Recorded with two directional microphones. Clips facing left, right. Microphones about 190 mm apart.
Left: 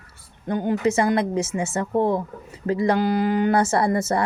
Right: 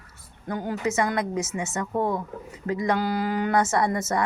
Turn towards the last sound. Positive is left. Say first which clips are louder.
# left 3 dB
turn(degrees=30)  # may be behind; listen again after turning